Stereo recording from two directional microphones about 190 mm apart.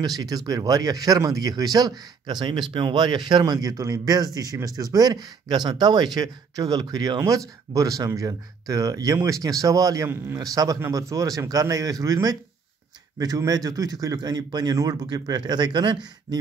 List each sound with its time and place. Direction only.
0.0 s speech: 20° right (ahead or behind)